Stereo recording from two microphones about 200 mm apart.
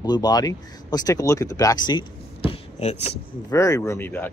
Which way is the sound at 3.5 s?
15° left (ahead or behind).